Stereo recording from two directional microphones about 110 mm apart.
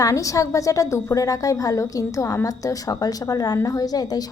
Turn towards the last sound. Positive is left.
turn(degrees=35)  # may be behind; listen again after turning